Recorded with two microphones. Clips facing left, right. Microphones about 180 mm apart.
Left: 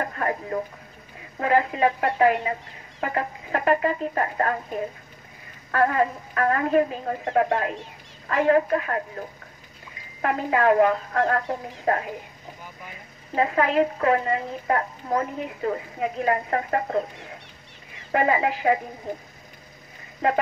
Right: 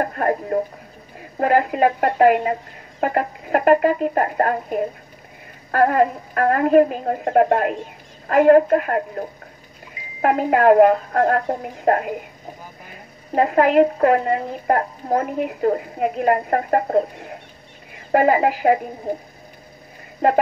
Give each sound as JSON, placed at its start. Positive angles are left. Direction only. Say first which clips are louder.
{"t": 0.0, "sound": "a sound", "louder": "right 6 dB", "side_deg": -45}
{"t": 1.4, "sound": "a woman's voice", "louder": "right 4 dB", "side_deg": -45}
{"t": 10.2, "sound": "a woman's voice", "louder": "right 6 dB", "side_deg": -50}